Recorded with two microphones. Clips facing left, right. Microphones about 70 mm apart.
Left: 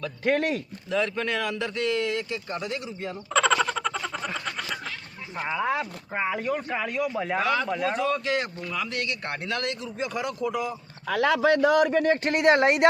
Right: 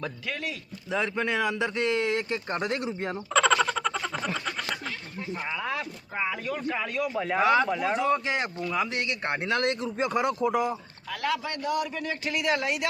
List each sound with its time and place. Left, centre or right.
0.3 s a man's voice: left
0.9 s speech: centre
1.8 s speech: right
3.3 s a sound: centre
5.6 s speech: left
6.7 s speech: centre
7.4 s speech: centre
9.5 s speech: right
11.1 s a man's voice: left